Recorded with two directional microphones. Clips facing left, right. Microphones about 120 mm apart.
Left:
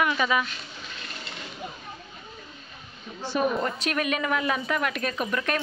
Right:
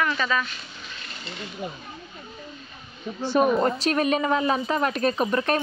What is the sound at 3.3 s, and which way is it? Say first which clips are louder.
Speech: right 5 dB; 35° right (ahead or behind).